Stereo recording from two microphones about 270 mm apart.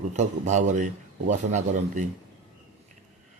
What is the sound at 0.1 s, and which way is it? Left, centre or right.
Speech, right.